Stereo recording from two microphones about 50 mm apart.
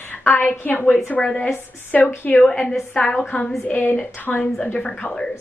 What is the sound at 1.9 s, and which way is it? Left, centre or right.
Speech, left.